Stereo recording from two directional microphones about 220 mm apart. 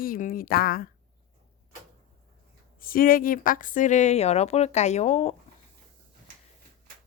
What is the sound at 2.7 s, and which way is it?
A woman's voice, 40° left (ahead or behind).